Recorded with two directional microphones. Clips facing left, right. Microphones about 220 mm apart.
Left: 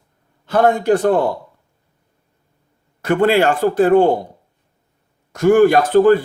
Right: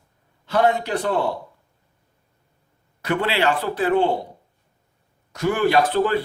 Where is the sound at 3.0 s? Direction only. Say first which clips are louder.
Left 7 dB; 50° left (ahead or behind).